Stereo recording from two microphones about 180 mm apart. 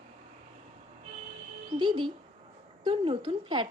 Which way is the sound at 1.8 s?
25° right (ahead or behind).